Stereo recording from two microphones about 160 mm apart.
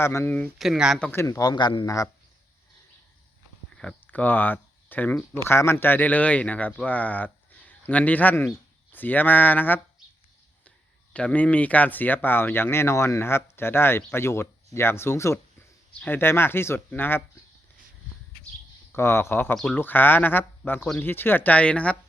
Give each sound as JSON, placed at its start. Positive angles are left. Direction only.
{"t": 0.0, "sound": "speech", "side_deg": 15}
{"t": 0.6, "sound": "speech", "side_deg": -5}
{"t": 0.9, "sound": "a man's voice", "side_deg": 10}
{"t": 3.8, "sound": "speech", "side_deg": 5}
{"t": 11.1, "sound": "speech", "side_deg": 5}
{"t": 18.9, "sound": "speech", "side_deg": 15}